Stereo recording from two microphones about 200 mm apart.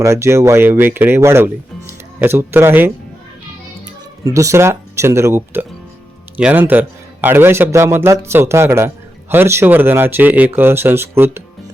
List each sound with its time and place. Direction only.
0.0 s a man's voice: 15° right (ahead or behind)
4.2 s a man's voice: 15° right (ahead or behind)